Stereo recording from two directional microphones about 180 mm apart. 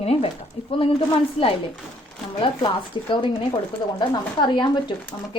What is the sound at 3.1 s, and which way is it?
Speech, 25° left (ahead or behind).